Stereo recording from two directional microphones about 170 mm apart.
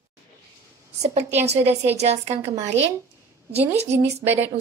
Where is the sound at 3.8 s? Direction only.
15° right (ahead or behind).